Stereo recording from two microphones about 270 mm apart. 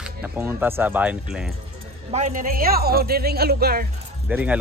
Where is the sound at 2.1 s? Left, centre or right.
Right.